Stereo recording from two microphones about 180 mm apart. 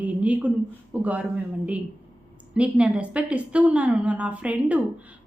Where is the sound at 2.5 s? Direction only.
5° right (ahead or behind).